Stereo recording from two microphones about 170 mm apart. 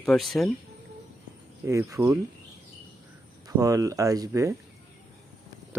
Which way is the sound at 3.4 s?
20° right (ahead or behind).